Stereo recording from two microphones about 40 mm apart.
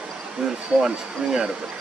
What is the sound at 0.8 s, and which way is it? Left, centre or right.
Speech, centre.